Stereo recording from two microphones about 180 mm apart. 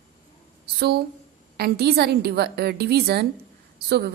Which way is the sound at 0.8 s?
60° right (ahead or behind).